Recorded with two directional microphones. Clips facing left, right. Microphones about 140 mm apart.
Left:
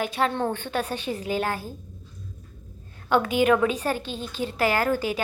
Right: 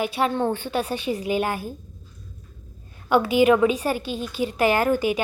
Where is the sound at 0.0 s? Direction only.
10° right (ahead or behind).